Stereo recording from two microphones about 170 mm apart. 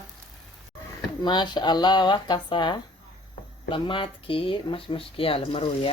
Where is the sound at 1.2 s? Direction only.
25° left (ahead or behind).